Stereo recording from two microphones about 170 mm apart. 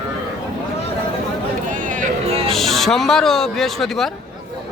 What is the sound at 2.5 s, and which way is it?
Speech, centre (ahead or behind).